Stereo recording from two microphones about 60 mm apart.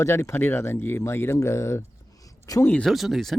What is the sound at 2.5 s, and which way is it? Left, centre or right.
Speech, left.